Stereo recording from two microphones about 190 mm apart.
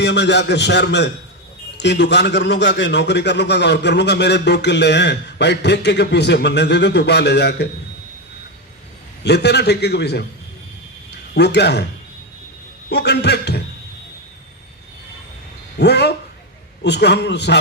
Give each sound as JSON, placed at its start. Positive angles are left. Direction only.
{"t": 0.0, "sound": "a man's voice", "side_deg": 65}
{"t": 9.2, "sound": "a man's voice", "side_deg": 60}
{"t": 11.3, "sound": "a man's voice", "side_deg": 60}
{"t": 12.9, "sound": "a man's voice", "side_deg": 60}
{"t": 15.8, "sound": "a man's voice", "side_deg": 60}